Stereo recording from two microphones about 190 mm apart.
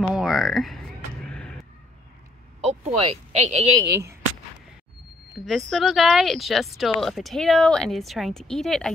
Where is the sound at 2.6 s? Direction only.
35° right (ahead or behind).